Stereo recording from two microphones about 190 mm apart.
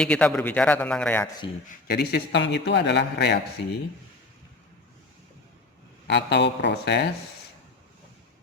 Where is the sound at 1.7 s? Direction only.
55° left (ahead or behind).